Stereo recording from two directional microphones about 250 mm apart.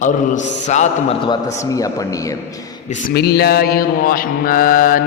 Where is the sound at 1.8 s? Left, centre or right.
Centre.